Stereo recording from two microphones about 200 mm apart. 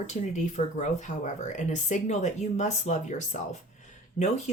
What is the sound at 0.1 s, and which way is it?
Speech, 35° left (ahead or behind).